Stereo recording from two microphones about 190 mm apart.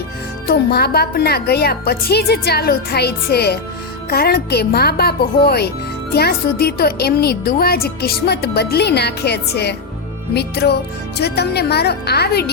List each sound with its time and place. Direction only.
0.4 s speech: 55° left (ahead or behind)